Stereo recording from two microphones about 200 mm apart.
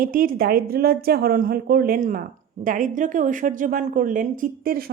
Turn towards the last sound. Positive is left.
turn(degrees=-45)  # may be behind; listen again after turning